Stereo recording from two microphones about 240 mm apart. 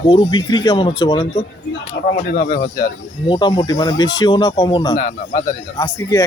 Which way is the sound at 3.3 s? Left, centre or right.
Centre.